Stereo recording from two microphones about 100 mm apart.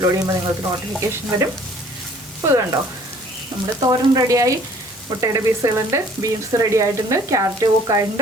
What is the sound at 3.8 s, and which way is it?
Speech, 35° right (ahead or behind).